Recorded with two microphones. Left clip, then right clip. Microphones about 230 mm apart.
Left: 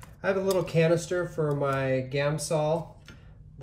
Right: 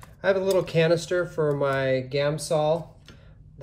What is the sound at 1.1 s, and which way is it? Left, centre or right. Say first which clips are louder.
Speech: right 4 dB; centre.